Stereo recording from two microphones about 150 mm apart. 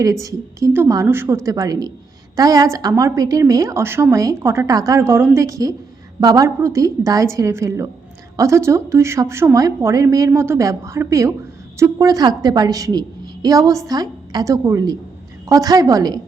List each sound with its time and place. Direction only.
0.0 s a woman's voice: 20° right (ahead or behind)